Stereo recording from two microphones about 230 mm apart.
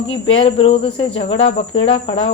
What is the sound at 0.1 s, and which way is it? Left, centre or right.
Speech, left.